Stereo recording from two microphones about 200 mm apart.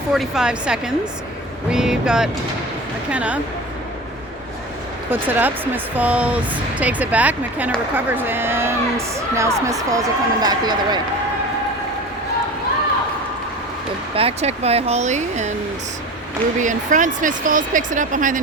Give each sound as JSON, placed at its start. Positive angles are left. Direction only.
{"t": 0.1, "sound": "a woman's voice", "side_deg": 0}
{"t": 5.3, "sound": "speech", "side_deg": -10}
{"t": 14.2, "sound": "speech", "side_deg": -30}
{"t": 16.6, "sound": "speech", "side_deg": -40}